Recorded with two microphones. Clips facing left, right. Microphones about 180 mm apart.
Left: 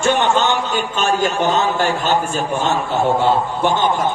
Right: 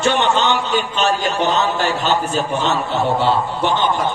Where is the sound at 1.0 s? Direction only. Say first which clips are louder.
Left 3 dB; 50° left (ahead or behind).